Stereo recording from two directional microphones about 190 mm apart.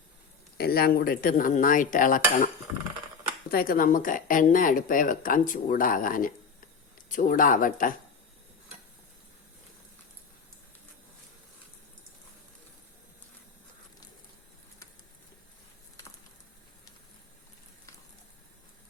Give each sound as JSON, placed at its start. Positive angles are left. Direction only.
{"t": 0.5, "sound": "speech", "side_deg": 55}
{"t": 3.5, "sound": "speech", "side_deg": 50}